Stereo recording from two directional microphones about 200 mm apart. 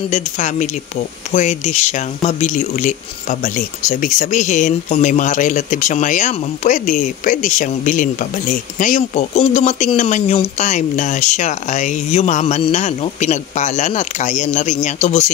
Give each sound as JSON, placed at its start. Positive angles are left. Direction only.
{"t": 0.1, "sound": "speech", "side_deg": 35}